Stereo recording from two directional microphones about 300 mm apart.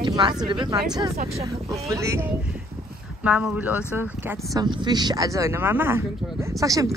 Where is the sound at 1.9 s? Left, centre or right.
Centre.